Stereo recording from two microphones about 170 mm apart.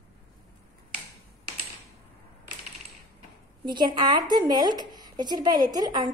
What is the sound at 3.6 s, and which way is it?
A woman's voice, 25° right (ahead or behind).